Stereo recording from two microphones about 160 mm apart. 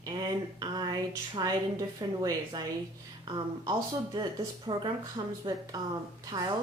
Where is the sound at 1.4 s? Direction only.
25° right (ahead or behind).